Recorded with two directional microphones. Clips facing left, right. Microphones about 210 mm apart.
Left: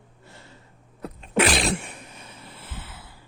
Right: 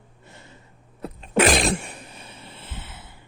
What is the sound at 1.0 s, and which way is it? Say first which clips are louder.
Sneeze: right 3 dB; 35° right (ahead or behind).